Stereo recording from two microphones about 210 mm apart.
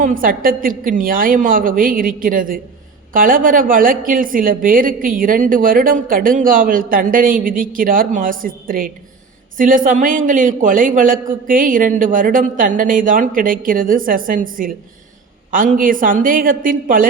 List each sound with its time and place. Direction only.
0.0 s a woman's voice: 40° right (ahead or behind)